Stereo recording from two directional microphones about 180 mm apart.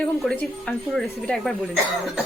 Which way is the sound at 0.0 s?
5° left (ahead or behind).